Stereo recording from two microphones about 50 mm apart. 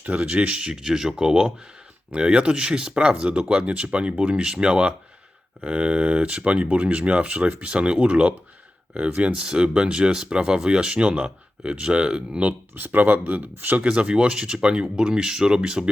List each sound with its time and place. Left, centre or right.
0.2 s speech: right
9.3 s speech: centre
12.7 s speech: right
13.8 s speech: centre